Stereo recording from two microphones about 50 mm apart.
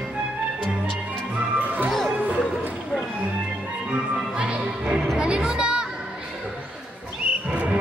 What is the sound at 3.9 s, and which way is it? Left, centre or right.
Music, right.